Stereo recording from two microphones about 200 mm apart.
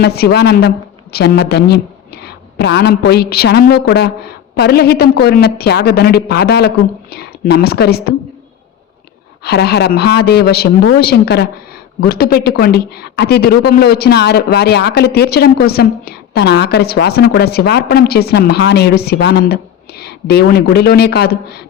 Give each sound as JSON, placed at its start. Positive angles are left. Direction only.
{"t": 0.0, "sound": "a woman's voice", "side_deg": 50}
{"t": 9.4, "sound": "a woman's voice", "side_deg": 55}